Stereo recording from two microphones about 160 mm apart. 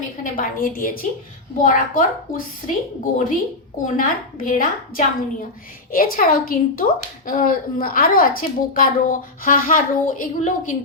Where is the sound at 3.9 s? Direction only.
60° left (ahead or behind).